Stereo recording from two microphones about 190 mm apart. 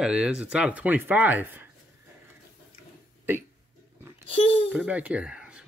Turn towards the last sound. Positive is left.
turn(degrees=-5)  # may be behind; listen again after turning